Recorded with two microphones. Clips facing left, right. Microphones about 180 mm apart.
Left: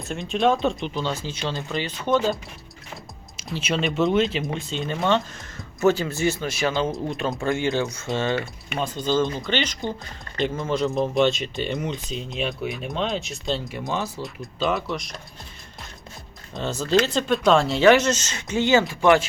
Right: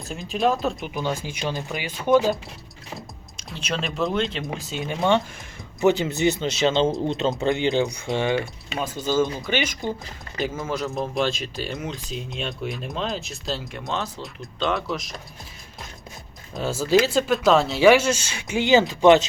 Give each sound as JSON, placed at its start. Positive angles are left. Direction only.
{"t": 0.1, "sound": "speech", "side_deg": 0}
{"t": 0.9, "sound": "speech", "side_deg": -15}
{"t": 3.3, "sound": "speech", "side_deg": 5}
{"t": 5.8, "sound": "speech", "side_deg": -20}
{"t": 16.6, "sound": "speech", "side_deg": -5}